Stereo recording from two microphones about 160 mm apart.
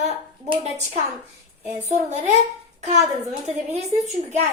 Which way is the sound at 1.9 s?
50° right (ahead or behind).